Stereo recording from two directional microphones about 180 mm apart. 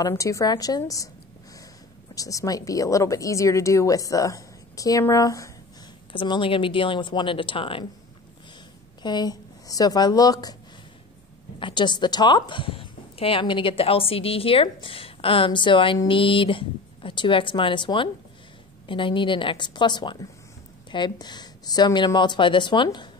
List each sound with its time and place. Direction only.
0.0 s speech: 15° left (ahead or behind)
2.1 s speech: 20° left (ahead or behind)
9.0 s a woman's voice: 25° left (ahead or behind)
11.6 s speech: 25° left (ahead or behind)